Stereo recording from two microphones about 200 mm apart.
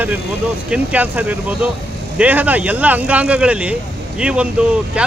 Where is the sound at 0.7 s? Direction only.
5° right (ahead or behind).